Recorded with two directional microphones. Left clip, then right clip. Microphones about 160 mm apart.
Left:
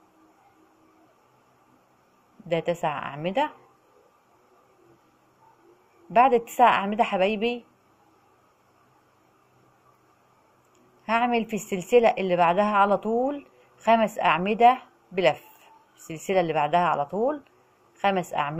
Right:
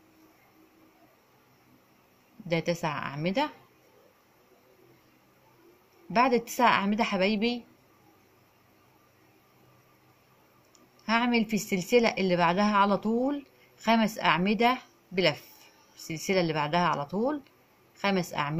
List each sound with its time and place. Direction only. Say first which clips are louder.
2.4 s a woman's voice: left 4 dB; 30° right (ahead or behind)
6.2 s a woman's voice: left 5 dB; 30° right (ahead or behind)
11.1 s a woman's voice: left 3 dB; 30° right (ahead or behind)